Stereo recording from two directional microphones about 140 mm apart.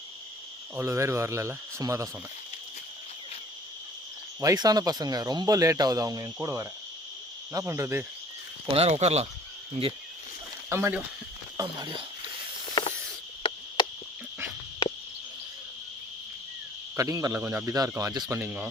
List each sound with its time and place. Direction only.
0.8 s speech: 20° right (ahead or behind)
4.4 s speech: 25° right (ahead or behind)
8.6 s speech: 45° right (ahead or behind)
10.7 s speech: 20° right (ahead or behind)
11.5 s speech: 30° right (ahead or behind)
13.4 s cricket: 35° left (ahead or behind)
17.0 s speech: 25° right (ahead or behind)
18.3 s speech: 10° right (ahead or behind)